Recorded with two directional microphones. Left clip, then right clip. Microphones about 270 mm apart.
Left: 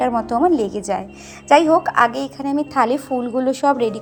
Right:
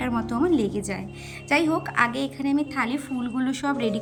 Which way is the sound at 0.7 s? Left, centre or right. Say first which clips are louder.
Left 7 dB; centre.